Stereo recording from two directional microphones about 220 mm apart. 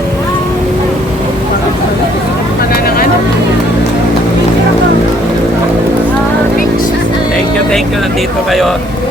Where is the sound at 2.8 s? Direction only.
45° left (ahead or behind).